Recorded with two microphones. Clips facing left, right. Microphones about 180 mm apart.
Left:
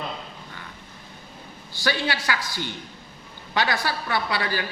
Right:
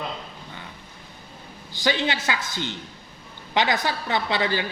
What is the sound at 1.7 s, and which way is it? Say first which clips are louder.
Speech: right 2 dB; 20° right (ahead or behind).